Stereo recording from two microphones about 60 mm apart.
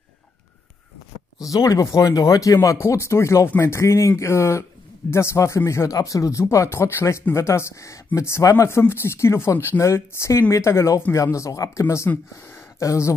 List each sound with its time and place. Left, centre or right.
1.4 s speech: left
5.9 s speech: left
6.5 s speech: left
6.8 s speech: left
11.8 s speech: left
12.4 s a sound: left
12.8 s speech: left